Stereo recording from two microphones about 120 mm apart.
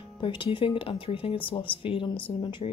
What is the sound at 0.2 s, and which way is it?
Speech, 45° left (ahead or behind).